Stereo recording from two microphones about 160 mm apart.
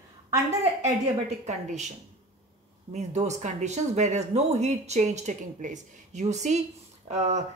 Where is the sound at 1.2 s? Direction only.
45° right (ahead or behind).